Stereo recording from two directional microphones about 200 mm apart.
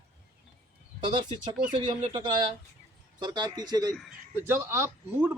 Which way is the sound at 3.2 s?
20° right (ahead or behind).